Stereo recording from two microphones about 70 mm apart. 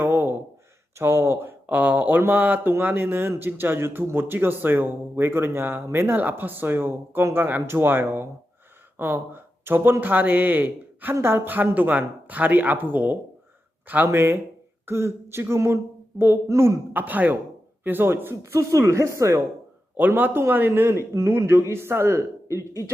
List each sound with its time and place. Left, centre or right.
0.0 s a sound: right
0.9 s speech: right
16.9 s speech: right
18.7 s speech: right
20.0 s speech: right